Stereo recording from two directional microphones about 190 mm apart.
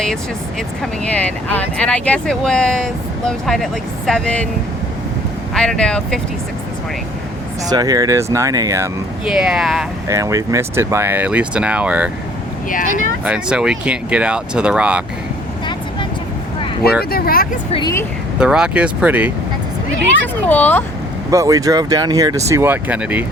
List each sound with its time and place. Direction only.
0.8 s speech: 5° left (ahead or behind)
5.5 s speech: 5° left (ahead or behind)
7.7 s speech: 20° right (ahead or behind)
9.2 s speech: 5° right (ahead or behind)
10.1 s speech: 15° right (ahead or behind)
12.6 s speech: 45° left (ahead or behind)
13.2 s speech: 5° right (ahead or behind)
16.8 s speech: 55° left (ahead or behind)
17.7 s speech: 25° left (ahead or behind)
18.3 s speech: 5° right (ahead or behind)
20.2 s speech: 10° left (ahead or behind)
21.2 s speech: 20° right (ahead or behind)